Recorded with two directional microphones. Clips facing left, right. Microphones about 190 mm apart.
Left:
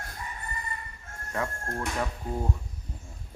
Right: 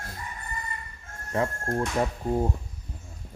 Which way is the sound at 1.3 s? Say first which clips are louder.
Right 5 dB; 25° right (ahead or behind).